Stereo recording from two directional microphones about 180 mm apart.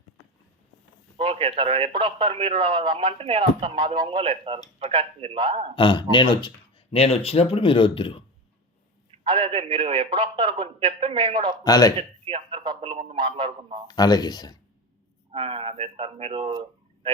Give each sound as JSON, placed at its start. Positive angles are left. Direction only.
{"t": 1.1, "sound": "speech", "side_deg": -30}
{"t": 5.7, "sound": "speech", "side_deg": 25}
{"t": 9.2, "sound": "speech", "side_deg": -30}
{"t": 11.5, "sound": "speech", "side_deg": 20}
{"t": 11.9, "sound": "speech", "side_deg": -30}
{"t": 13.8, "sound": "speech", "side_deg": 20}
{"t": 15.3, "sound": "a man's voice", "side_deg": -35}